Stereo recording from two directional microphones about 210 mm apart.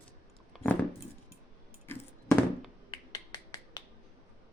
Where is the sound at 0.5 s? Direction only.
5° left (ahead or behind).